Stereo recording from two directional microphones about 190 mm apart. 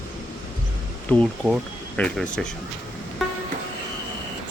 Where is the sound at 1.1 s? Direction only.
Centre (ahead or behind).